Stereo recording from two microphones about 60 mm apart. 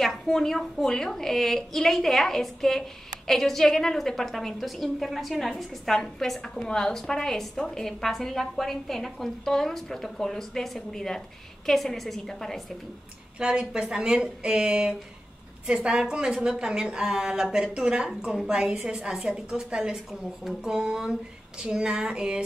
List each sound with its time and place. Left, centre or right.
0.0 s a woman's voice: centre
13.4 s a woman's voice: centre